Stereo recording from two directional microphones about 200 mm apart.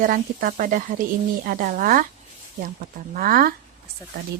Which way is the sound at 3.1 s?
45° right (ahead or behind).